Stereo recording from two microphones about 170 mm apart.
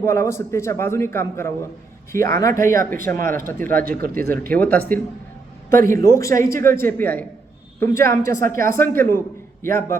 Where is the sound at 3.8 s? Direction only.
55° right (ahead or behind).